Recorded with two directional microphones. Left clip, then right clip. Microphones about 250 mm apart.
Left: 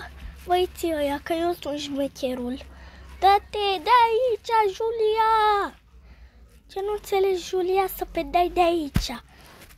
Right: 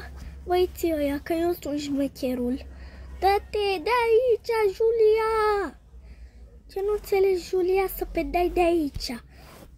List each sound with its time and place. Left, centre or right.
0.0 s a sound: centre
0.8 s speech: centre
1.4 s speech: left
5.1 s speech: centre
6.7 s speech: left
7.3 s speech: centre
7.6 s speech: left